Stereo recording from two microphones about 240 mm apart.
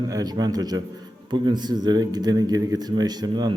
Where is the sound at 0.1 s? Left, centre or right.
Centre.